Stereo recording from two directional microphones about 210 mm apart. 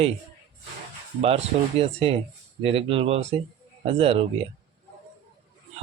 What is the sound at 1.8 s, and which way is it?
Speech, 25° right (ahead or behind).